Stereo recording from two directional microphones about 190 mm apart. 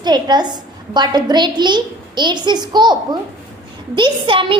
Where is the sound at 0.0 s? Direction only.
20° right (ahead or behind).